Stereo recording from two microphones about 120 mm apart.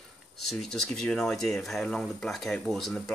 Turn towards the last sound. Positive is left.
turn(degrees=0)  # may be behind; listen again after turning